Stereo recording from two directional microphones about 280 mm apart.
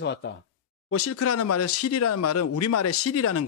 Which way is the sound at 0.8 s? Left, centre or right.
Left.